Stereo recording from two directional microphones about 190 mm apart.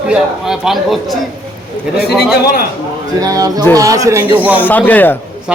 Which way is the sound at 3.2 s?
20° right (ahead or behind).